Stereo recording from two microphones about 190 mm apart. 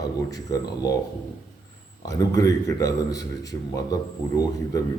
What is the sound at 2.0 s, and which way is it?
Speech, 20° left (ahead or behind).